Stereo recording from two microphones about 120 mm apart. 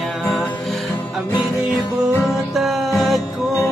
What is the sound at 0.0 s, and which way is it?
Music, centre (ahead or behind).